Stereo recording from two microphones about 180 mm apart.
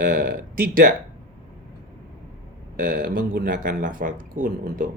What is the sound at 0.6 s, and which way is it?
Speech, 55° right (ahead or behind).